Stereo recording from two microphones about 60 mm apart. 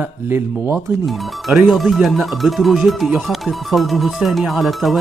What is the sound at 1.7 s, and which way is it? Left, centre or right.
Speech, centre.